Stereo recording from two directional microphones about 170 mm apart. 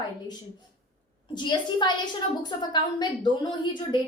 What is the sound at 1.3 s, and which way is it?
A woman's voice, 25° left (ahead or behind).